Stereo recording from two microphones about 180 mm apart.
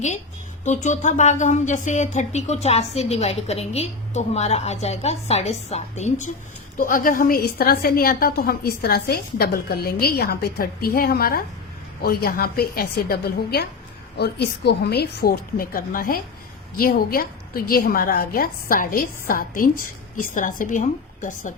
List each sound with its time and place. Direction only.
0.6 s a woman's voice: 40° left (ahead or behind)